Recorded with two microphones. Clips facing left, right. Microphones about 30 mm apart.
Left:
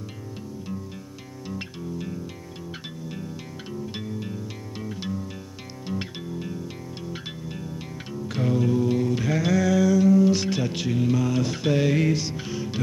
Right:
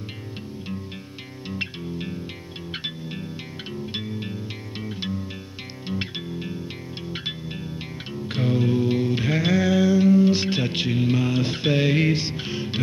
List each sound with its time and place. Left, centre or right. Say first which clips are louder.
1.5 s music: right 3 dB; right